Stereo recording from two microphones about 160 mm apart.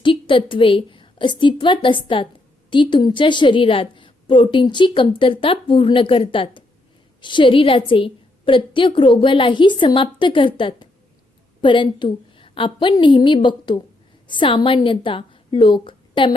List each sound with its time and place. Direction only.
0.0 s a woman's voice: 30° left (ahead or behind)